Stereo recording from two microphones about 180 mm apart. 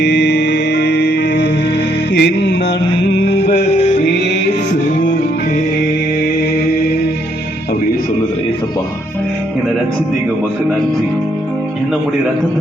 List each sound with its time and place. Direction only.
0.0 s music: 70° left (ahead or behind)